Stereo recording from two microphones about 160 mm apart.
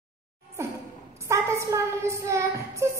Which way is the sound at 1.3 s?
20° right (ahead or behind).